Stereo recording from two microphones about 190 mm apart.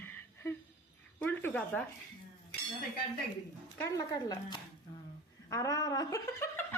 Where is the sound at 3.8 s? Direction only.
15° left (ahead or behind).